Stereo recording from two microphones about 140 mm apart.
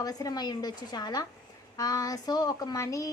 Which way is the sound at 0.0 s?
25° left (ahead or behind).